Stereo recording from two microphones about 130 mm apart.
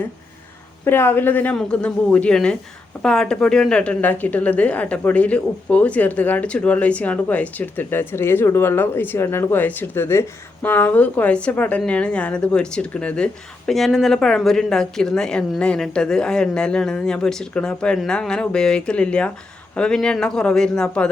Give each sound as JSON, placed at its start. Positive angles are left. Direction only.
{"t": 0.9, "sound": "a woman's voice", "side_deg": 15}